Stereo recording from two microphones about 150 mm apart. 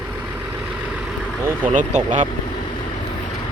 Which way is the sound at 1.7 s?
55° right (ahead or behind).